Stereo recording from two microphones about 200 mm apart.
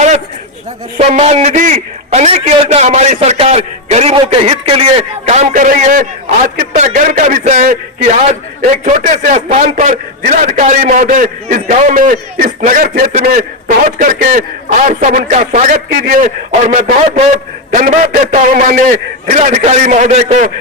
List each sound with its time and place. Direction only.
0.9 s a man's voice: 30° right (ahead or behind)